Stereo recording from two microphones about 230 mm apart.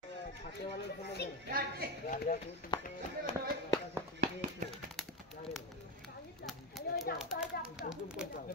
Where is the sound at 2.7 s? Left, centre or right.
Centre.